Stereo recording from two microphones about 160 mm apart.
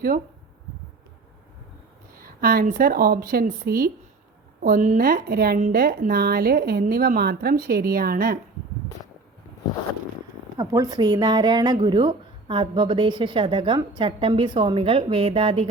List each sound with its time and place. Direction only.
2.1 s a woman's voice: 65° right (ahead or behind)
4.6 s a woman's voice: 55° right (ahead or behind); by 5.5 s 70° right (ahead or behind)
5.5 s a woman's voice: 50° right (ahead or behind)
5.8 s speech: 65° right (ahead or behind)
10.6 s speech: 25° right (ahead or behind)